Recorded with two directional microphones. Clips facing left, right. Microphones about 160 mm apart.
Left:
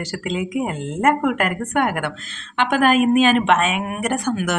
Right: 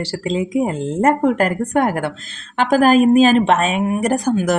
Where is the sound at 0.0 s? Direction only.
30° right (ahead or behind).